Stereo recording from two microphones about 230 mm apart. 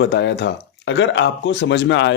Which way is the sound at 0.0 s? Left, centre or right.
Left.